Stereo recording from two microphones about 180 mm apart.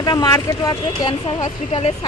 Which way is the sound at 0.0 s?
20° left (ahead or behind).